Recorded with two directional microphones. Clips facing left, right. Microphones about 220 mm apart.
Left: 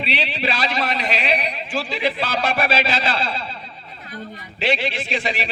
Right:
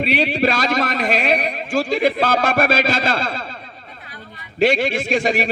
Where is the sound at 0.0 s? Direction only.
45° right (ahead or behind).